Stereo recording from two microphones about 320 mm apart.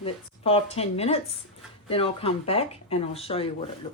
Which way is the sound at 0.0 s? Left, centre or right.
Centre.